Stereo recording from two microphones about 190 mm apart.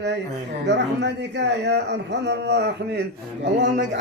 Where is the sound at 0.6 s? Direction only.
65° right (ahead or behind).